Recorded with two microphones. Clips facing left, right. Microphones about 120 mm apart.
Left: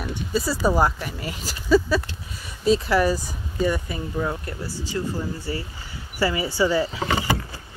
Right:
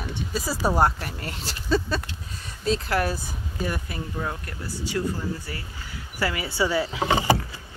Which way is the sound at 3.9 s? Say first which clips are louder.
Left 4 dB; 10° left (ahead or behind).